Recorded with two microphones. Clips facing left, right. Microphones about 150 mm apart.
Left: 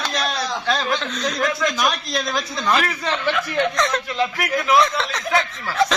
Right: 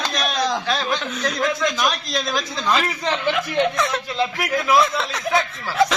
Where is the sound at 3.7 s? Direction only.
5° right (ahead or behind).